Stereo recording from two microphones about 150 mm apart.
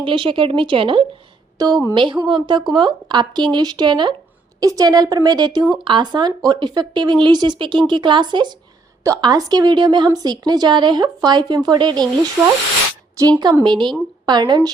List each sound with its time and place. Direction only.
0.0 s a woman's voice: 35° right (ahead or behind)
12.4 s speech: 15° right (ahead or behind)
13.4 s a woman's voice: 30° right (ahead or behind)